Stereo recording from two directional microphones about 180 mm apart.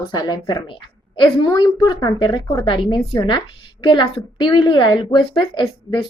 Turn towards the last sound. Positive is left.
turn(degrees=30)  # may be behind; listen again after turning